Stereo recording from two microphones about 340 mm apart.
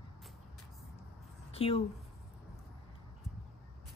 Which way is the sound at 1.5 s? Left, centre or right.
Centre.